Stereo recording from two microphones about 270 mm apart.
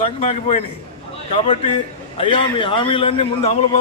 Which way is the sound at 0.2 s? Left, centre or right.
Left.